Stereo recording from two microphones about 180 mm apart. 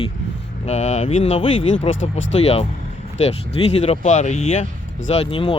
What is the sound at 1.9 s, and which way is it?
Speech, 90° left.